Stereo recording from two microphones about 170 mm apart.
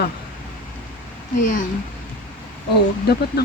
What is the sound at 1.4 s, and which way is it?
Speech, 50° left (ahead or behind).